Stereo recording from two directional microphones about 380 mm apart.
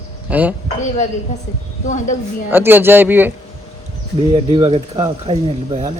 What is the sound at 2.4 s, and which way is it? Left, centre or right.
Speech, centre.